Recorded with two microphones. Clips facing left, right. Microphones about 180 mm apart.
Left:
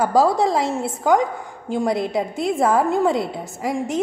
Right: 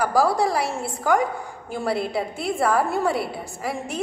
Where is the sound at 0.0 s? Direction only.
20° left (ahead or behind).